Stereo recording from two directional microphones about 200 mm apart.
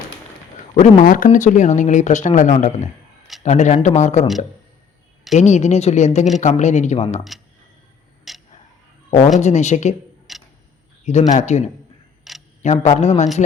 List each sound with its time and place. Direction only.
0.7 s speech: 35° left (ahead or behind)
5.3 s speech: 35° left (ahead or behind)
8.3 s a sound: centre (ahead or behind)
9.0 s speech: 35° left (ahead or behind)
10.3 s tick: centre (ahead or behind)
11.0 s speech: 35° left (ahead or behind)
12.3 s camera: centre (ahead or behind)
12.6 s speech: 35° left (ahead or behind)